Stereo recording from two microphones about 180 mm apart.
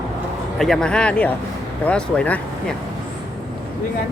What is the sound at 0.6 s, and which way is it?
A woman's voice, 5° left (ahead or behind).